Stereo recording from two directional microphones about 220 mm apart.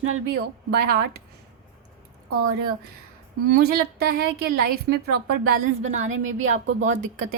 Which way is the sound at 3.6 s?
45° right (ahead or behind).